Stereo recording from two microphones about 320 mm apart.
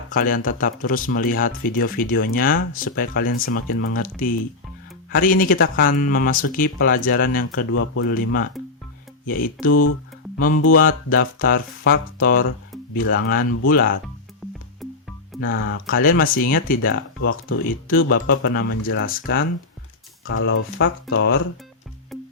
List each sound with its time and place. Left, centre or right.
0.1 s speech: left
7.7 s speech: left
8.6 s music: centre
9.2 s speech: left
9.8 s music: left
10.8 s speech: left
14.4 s music: centre
15.4 s speech: left
15.9 s speech: left
20.2 s speech: left
22.1 s music: centre